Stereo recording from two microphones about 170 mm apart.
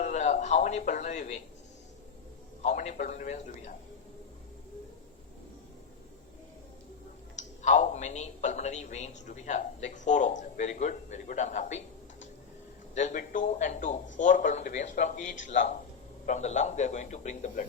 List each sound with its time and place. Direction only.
0.0 s speech: 45° left (ahead or behind)
2.6 s speech: 50° left (ahead or behind)
7.3 s speech: 45° left (ahead or behind)
12.9 s speech: 45° left (ahead or behind)